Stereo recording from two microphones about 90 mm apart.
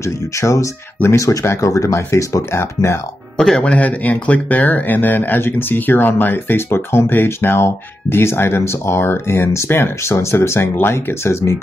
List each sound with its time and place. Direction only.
0.0 s speech: 35° left (ahead or behind)
3.3 s speech: 10° left (ahead or behind); by 11.5 s 25° left (ahead or behind)